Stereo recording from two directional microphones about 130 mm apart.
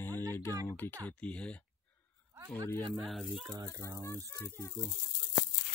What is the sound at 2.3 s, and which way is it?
Speech, 25° right (ahead or behind).